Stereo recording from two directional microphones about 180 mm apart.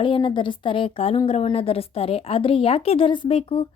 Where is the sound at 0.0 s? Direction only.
25° left (ahead or behind).